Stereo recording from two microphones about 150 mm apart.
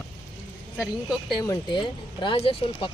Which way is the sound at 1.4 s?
30° left (ahead or behind).